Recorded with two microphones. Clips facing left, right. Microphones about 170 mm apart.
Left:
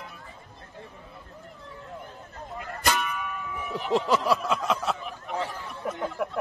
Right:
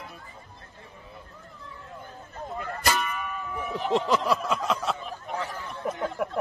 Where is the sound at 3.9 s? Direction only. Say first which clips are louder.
Left 1 dB; centre (ahead or behind).